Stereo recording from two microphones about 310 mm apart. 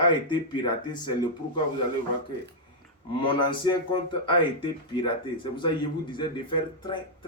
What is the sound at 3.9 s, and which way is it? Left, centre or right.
A man's voice, centre.